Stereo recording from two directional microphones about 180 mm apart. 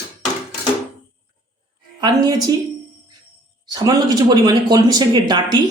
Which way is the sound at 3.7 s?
20° right (ahead or behind).